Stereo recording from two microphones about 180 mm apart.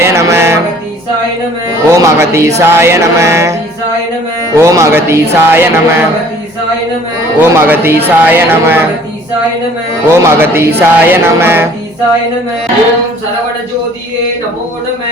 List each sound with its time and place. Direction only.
0.0 s music: 15° right (ahead or behind)
1.9 s music: 15° right (ahead or behind)
7.3 s music: 10° right (ahead or behind)
10.1 s music: 15° right (ahead or behind)